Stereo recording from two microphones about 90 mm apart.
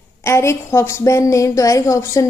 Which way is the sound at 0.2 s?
30° left (ahead or behind).